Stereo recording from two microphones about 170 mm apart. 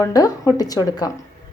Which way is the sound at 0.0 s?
20° left (ahead or behind).